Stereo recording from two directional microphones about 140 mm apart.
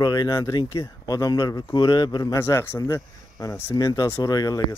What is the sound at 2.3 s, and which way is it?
Speech, 20° left (ahead or behind).